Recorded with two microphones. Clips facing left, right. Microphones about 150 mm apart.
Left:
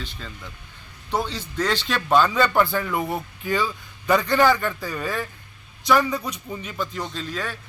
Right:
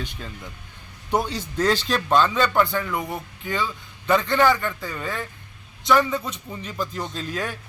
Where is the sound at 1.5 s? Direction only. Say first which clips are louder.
Right 3 dB; 40° right (ahead or behind).